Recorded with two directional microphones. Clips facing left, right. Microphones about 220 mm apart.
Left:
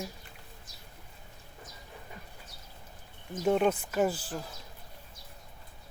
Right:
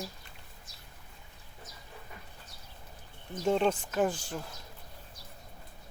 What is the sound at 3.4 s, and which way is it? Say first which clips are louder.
Speech: left 1 dB; 5° left (ahead or behind).